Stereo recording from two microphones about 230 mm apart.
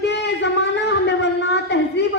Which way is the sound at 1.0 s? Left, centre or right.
Left.